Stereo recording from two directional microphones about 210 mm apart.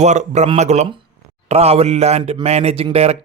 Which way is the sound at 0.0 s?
35° right (ahead or behind).